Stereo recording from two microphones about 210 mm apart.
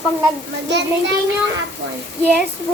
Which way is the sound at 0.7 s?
55° right (ahead or behind).